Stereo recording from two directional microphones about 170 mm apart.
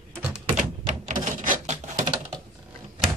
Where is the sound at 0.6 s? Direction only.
45° right (ahead or behind).